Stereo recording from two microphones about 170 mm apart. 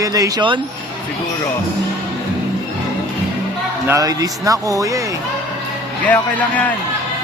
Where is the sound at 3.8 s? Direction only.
20° right (ahead or behind).